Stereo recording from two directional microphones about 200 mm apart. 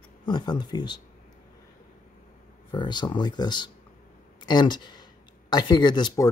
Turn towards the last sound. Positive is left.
turn(degrees=20)  # may be behind; listen again after turning